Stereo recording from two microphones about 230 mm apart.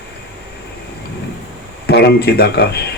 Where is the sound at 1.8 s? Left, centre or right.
Left.